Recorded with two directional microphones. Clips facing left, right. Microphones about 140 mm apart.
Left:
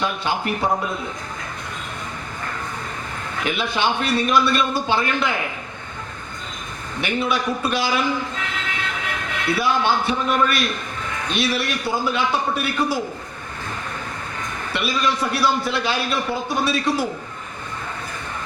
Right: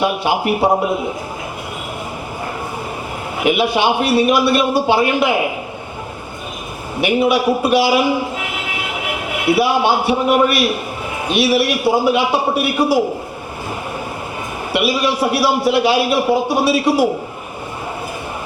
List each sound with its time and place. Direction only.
0.0 s a man's voice: 10° right (ahead or behind)
0.6 s a man's voice: 30° right (ahead or behind)
0.9 s a man's voice: 10° right (ahead or behind)
3.3 s a man's voice: 10° right (ahead or behind)
7.0 s a man's voice: 10° right (ahead or behind)
14.7 s a man's voice: 10° right (ahead or behind)